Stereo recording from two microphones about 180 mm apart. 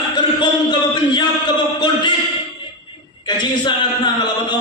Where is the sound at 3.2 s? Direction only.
25° left (ahead or behind).